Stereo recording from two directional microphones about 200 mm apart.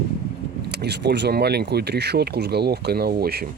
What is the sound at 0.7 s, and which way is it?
Speech, 55° right (ahead or behind).